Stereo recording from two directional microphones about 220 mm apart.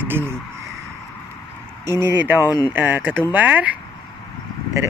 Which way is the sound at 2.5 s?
15° left (ahead or behind).